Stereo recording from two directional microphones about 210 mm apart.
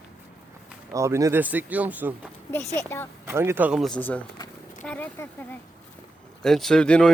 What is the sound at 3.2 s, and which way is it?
Speech, 10° right (ahead or behind).